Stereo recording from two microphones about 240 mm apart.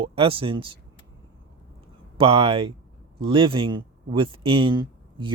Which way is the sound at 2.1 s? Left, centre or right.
Right.